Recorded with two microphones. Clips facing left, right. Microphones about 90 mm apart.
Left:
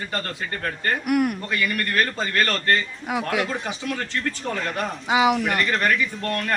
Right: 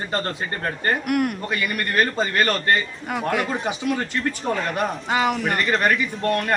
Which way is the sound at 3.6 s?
20° right (ahead or behind).